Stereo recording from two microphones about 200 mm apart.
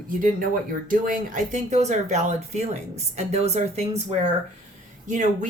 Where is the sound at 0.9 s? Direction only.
40° right (ahead or behind).